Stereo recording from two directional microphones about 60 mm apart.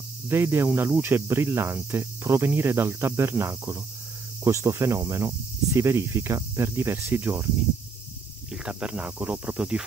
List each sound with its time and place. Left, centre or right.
0.3 s cricket: right
7.2 s cricket: right
8.5 s speech: centre